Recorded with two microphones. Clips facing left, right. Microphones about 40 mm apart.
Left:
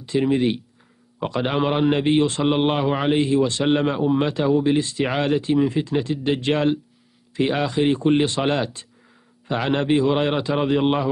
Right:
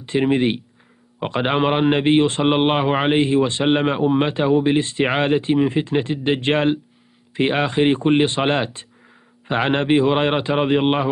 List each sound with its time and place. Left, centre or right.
0.0 s a man's voice: right